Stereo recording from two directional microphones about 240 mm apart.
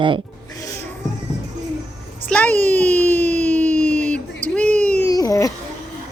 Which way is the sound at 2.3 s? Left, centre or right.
Centre.